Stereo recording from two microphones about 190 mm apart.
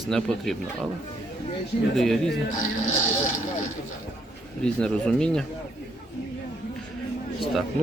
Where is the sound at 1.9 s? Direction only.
Centre (ahead or behind).